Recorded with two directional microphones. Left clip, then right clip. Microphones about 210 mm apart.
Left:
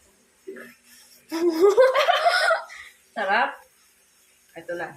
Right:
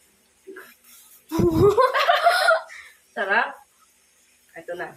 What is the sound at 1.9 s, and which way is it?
Snicker, 20° right (ahead or behind).